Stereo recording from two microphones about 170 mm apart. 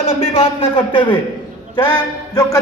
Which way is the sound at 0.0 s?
35° left (ahead or behind).